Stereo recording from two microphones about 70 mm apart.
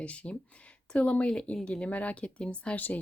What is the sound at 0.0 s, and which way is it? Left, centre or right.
Speech, centre.